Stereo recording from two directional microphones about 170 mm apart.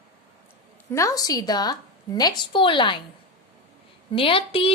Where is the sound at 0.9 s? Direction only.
20° left (ahead or behind).